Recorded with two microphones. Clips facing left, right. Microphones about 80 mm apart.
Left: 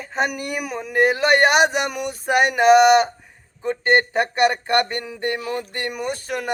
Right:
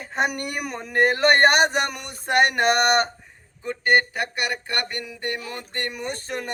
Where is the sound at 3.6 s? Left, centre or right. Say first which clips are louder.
Left 2 dB; left; by 6.4 s centre.